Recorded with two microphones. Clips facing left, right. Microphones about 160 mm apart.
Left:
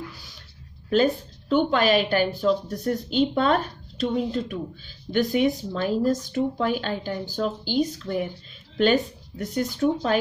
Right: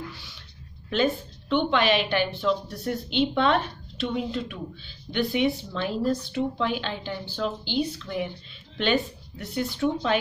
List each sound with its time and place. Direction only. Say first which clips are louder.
0.8 s a woman's voice: left 4 dB; 40° left (ahead or behind)